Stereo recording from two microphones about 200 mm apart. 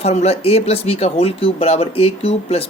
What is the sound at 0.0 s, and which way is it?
Speech, 30° left (ahead or behind).